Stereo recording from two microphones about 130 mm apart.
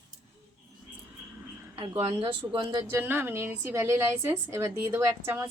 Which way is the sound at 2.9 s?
15° right (ahead or behind).